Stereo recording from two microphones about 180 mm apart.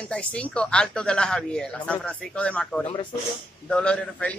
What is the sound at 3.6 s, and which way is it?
Speech, 5° left (ahead or behind).